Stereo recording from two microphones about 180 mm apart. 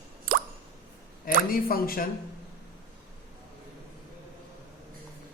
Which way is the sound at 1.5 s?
55° left (ahead or behind).